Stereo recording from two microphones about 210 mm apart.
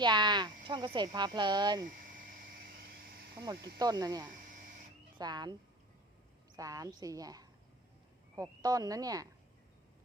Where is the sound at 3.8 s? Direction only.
20° right (ahead or behind).